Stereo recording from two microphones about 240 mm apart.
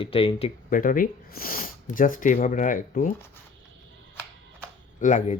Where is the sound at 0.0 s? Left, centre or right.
Left.